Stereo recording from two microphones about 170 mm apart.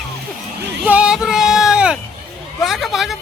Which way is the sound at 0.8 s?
5° right (ahead or behind).